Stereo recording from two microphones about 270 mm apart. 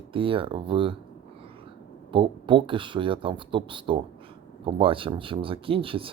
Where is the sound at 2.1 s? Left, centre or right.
Centre.